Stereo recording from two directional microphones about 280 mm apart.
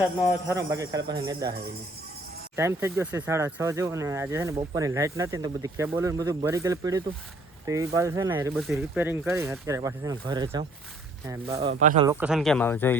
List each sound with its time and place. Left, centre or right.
0.0 s speech: centre
2.6 s speech: centre
11.7 s speech: right
12.0 s speech: centre